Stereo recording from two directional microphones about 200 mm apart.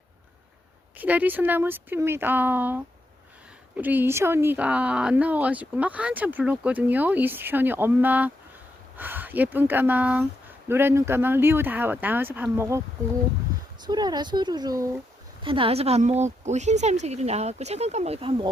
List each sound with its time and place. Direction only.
0.9 s speech: 10° right (ahead or behind)
13.8 s speech: 20° right (ahead or behind)